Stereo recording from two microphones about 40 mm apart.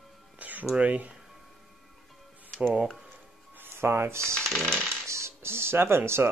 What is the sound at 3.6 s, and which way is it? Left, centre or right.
Music, right.